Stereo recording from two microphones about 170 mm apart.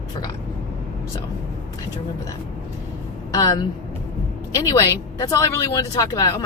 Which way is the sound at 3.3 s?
20° left (ahead or behind).